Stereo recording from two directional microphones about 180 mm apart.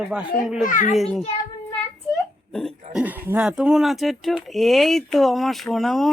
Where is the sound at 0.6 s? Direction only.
45° left (ahead or behind).